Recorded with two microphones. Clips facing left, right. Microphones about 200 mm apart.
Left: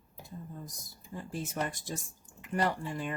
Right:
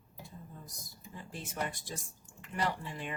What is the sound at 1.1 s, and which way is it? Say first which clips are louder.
Speech: left 5 dB; 45° left (ahead or behind).